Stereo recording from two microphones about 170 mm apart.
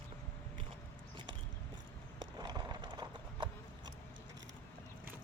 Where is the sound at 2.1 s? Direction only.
25° right (ahead or behind).